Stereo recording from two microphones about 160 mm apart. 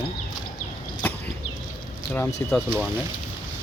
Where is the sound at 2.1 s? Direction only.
10° left (ahead or behind).